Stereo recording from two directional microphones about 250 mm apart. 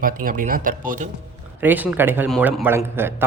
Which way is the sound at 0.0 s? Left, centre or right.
Right.